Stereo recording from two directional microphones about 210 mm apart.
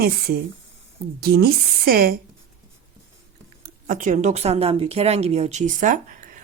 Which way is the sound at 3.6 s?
40° right (ahead or behind).